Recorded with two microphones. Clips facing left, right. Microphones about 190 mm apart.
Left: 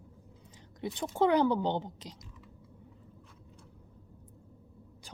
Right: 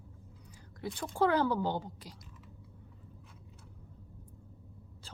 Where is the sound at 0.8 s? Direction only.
20° left (ahead or behind).